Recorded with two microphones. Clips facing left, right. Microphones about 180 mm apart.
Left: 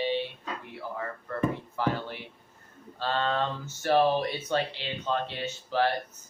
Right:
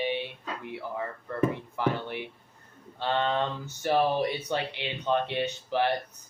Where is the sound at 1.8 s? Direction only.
20° right (ahead or behind).